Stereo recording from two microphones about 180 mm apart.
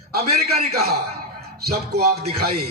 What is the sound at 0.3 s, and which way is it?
A man's voice, 60° right (ahead or behind).